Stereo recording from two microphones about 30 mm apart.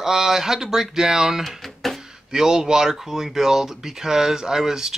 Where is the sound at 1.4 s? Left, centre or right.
Centre.